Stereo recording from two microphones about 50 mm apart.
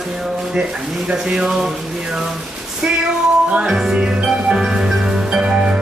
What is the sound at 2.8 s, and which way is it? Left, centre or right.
Speech, centre.